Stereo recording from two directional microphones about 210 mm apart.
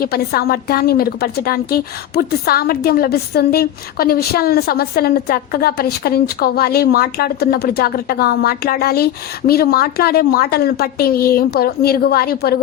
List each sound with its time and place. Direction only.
0.0 s a woman's voice: 45° left (ahead or behind)